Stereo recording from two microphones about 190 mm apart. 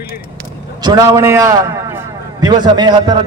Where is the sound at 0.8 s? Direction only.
20° right (ahead or behind).